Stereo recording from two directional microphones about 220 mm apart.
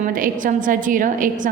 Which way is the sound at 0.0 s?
35° right (ahead or behind).